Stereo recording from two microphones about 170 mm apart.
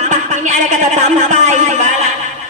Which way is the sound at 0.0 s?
45° right (ahead or behind).